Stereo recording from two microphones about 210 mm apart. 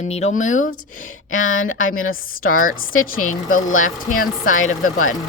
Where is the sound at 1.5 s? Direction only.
70° left (ahead or behind).